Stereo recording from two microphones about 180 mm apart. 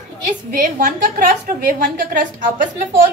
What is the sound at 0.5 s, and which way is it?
A woman's voice, 55° right (ahead or behind).